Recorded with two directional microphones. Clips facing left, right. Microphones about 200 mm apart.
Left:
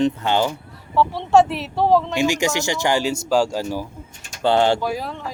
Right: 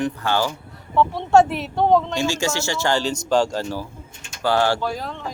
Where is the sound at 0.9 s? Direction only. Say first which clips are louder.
Even; centre (ahead or behind).